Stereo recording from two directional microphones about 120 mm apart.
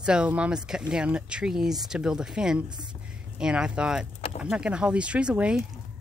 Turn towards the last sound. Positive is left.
turn(degrees=-10)  # may be behind; listen again after turning